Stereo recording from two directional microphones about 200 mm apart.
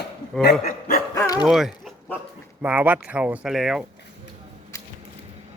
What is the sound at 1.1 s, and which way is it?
Dog, 15° left (ahead or behind).